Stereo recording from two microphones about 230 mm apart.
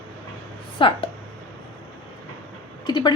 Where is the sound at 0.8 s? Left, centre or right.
Left.